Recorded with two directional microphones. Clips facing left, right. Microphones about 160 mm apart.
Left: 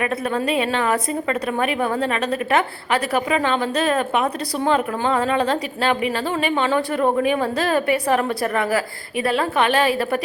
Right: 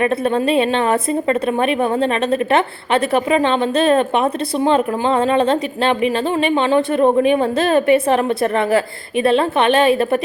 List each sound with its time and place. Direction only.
0.0 s a woman's voice: 25° right (ahead or behind)